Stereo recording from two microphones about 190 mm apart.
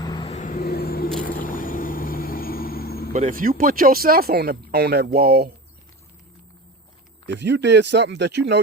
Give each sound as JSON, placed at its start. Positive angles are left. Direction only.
{"t": 0.0, "sound": "vehicle", "side_deg": 25}
{"t": 0.3, "sound": "vehicle", "side_deg": 40}
{"t": 0.6, "sound": "vehicle", "side_deg": 55}
{"t": 3.1, "sound": "speech", "side_deg": -40}
{"t": 7.3, "sound": "speech", "side_deg": -65}